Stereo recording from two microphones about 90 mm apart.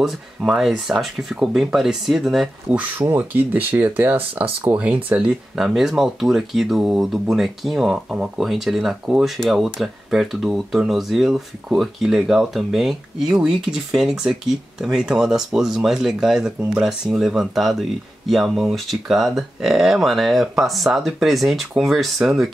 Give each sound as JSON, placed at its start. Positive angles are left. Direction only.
{"t": 0.0, "sound": "speech", "side_deg": -5}
{"t": 3.0, "sound": "speech", "side_deg": -20}